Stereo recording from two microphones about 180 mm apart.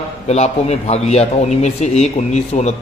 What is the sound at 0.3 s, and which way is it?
A man's voice, 35° left (ahead or behind).